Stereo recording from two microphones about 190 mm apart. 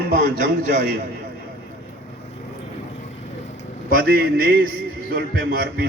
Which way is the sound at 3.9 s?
50° right (ahead or behind).